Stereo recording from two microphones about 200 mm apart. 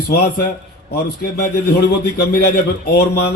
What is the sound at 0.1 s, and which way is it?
A man's voice, 55° left (ahead or behind).